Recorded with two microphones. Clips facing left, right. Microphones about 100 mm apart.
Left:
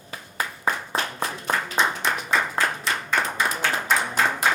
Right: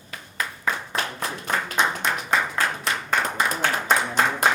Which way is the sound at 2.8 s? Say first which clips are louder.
Even; 50° right (ahead or behind).